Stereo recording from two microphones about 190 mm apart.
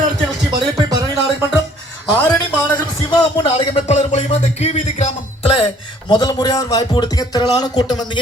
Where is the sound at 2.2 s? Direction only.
15° left (ahead or behind).